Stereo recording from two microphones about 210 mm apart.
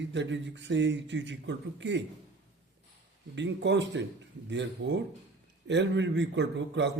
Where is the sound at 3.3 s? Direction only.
60° right (ahead or behind).